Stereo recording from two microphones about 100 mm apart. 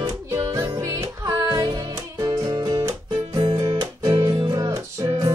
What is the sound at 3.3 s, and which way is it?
Music, 55° right (ahead or behind).